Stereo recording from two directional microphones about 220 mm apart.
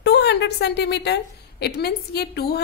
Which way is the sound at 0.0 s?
50° left (ahead or behind).